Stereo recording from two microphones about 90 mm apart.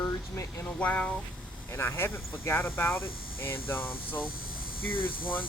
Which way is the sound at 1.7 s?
25° left (ahead or behind).